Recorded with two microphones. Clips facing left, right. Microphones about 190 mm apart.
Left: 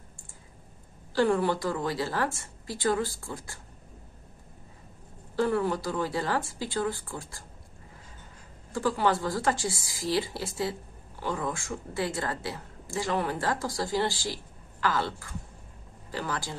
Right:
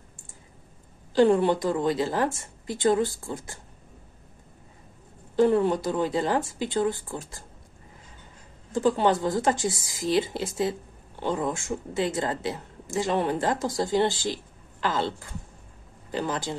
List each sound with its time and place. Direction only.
1.1 s speech: 20° right (ahead or behind)
5.3 s speech: 20° right (ahead or behind)
8.7 s speech: 20° right (ahead or behind)